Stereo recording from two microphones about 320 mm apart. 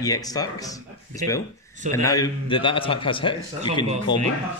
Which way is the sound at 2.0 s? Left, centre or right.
Centre.